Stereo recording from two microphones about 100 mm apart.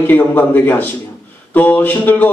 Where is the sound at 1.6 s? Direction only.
15° left (ahead or behind).